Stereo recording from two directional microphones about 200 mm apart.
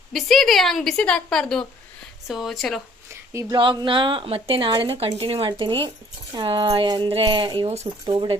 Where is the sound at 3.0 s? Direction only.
15° right (ahead or behind).